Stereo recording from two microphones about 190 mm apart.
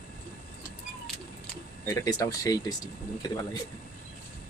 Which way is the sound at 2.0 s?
20° left (ahead or behind).